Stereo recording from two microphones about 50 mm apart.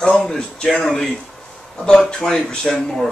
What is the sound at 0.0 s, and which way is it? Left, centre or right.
Speech, centre.